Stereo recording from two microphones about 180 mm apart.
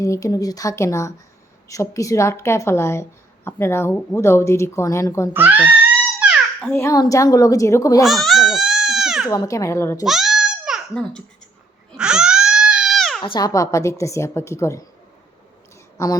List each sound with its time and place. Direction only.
0.0 s a woman's voice: 20° left (ahead or behind)
5.3 s speech: 10° right (ahead or behind)
6.1 s babbling: 5° right (ahead or behind)
6.7 s a woman's voice: 15° left (ahead or behind)
8.0 s baby cry: centre (ahead or behind)
9.3 s a woman's voice: 20° left (ahead or behind)
10.0 s a sound: centre (ahead or behind)
11.9 s crying: 5° right (ahead or behind)
13.2 s a woman's voice: 25° left (ahead or behind)